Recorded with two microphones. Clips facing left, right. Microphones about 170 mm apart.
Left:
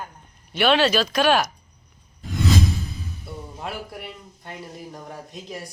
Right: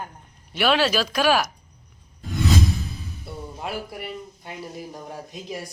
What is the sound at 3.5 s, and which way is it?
A man's voice, 5° right (ahead or behind).